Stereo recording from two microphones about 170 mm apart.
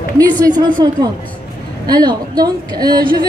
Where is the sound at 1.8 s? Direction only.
25° right (ahead or behind).